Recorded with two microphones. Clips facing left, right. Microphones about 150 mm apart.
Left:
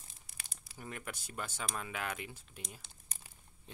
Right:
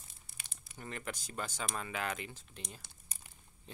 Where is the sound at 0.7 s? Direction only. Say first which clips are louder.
Right 2 dB; 5° left (ahead or behind).